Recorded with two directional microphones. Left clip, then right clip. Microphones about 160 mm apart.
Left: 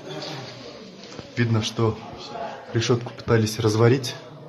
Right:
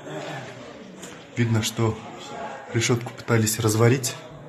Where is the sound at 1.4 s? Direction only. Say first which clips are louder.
Left 1 dB; centre (ahead or behind).